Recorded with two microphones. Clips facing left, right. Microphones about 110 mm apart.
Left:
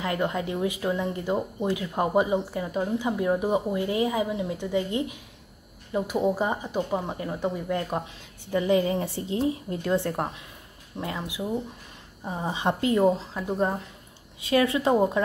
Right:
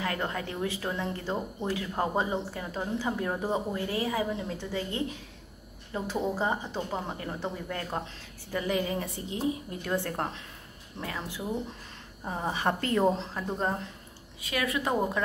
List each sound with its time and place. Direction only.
0.0 s speech: 20° left (ahead or behind)
8.5 s a woman's voice: 25° left (ahead or behind)
9.8 s a woman's voice: 20° left (ahead or behind)
14.4 s a woman's voice: 30° left (ahead or behind)